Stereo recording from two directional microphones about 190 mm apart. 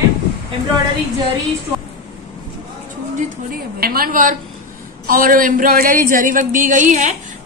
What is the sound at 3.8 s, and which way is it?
Speech, 50° right (ahead or behind).